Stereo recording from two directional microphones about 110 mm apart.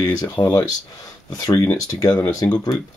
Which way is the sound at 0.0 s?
40° left (ahead or behind).